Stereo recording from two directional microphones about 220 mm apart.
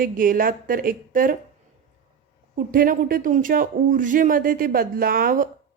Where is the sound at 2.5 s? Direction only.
40° right (ahead or behind).